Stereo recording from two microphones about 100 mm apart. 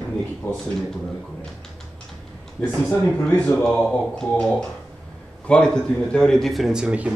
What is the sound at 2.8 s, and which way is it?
Speech, 15° left (ahead or behind).